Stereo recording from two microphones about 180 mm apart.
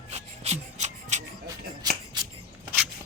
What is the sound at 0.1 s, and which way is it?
Rub, 35° right (ahead or behind).